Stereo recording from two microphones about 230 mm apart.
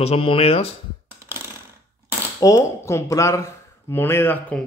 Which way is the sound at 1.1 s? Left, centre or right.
Centre.